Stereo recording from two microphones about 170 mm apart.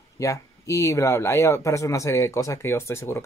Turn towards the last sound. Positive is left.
turn(degrees=15)  # may be behind; listen again after turning